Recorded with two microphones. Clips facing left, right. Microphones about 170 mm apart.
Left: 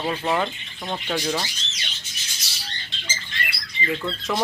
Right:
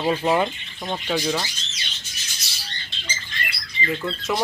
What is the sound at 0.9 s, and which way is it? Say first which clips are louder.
Speech: right 2 dB; 5° right (ahead or behind).